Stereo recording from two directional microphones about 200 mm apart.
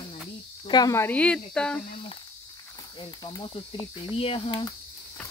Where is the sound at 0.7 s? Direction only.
20° left (ahead or behind).